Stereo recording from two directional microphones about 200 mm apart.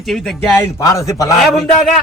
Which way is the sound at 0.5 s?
15° left (ahead or behind).